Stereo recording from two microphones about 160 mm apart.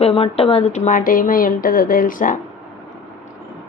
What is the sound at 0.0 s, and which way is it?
A woman's voice, 35° left (ahead or behind).